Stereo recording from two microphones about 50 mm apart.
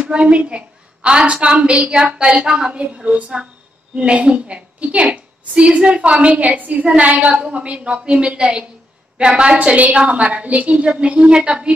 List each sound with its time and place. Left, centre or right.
0.0 s a woman's voice: right